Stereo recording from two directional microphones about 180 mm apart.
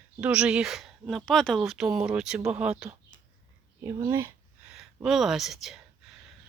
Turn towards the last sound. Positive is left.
turn(degrees=0)  # may be behind; listen again after turning